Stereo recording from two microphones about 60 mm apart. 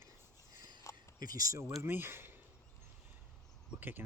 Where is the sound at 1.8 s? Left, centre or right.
Right.